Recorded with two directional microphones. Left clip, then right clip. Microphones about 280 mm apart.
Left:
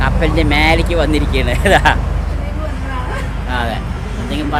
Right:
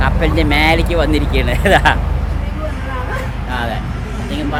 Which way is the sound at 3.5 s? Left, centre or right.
Centre.